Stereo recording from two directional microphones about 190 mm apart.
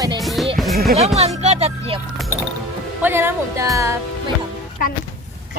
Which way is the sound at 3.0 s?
10° right (ahead or behind).